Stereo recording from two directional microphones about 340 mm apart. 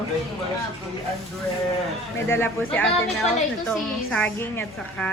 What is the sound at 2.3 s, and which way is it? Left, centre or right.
A woman's voice, centre.